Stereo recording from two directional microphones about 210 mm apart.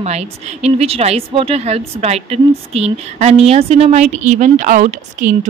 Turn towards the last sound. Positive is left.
turn(degrees=-35)  # may be behind; listen again after turning